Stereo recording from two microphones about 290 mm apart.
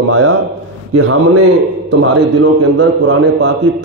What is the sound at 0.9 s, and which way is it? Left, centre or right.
A man's voice, right.